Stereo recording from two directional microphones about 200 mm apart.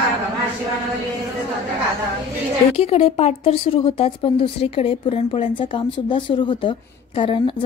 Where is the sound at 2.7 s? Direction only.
30° left (ahead or behind).